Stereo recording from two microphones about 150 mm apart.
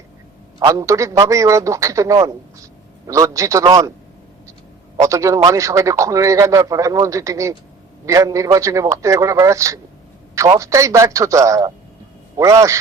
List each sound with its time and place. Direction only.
0.6 s a man's voice: 25° right (ahead or behind)
4.9 s a man's voice: 20° right (ahead or behind)